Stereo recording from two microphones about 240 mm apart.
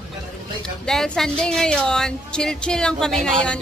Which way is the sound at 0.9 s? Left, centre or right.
Centre.